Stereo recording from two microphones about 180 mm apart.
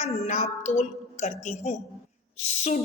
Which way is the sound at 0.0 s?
40° left (ahead or behind).